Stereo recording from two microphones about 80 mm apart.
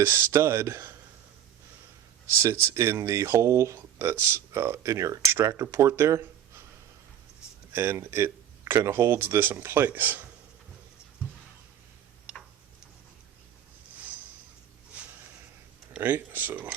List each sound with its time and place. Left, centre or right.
0.0 s speech: right
2.4 s speech: right
7.7 s speech: right
12.3 s tick-tock: centre
16.0 s speech: right